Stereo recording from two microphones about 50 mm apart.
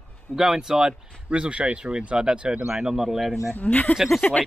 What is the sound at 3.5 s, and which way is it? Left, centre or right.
Speech, left.